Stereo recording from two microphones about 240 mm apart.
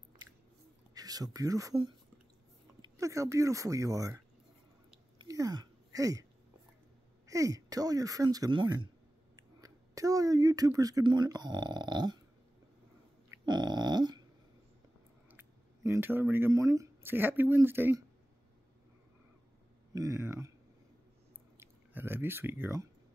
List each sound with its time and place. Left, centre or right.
0.9 s speech: centre
5.2 s a sound: centre
7.2 s speech: centre
13.5 s dog: centre
15.3 s speech: centre
19.9 s speech: centre
21.5 s speech: centre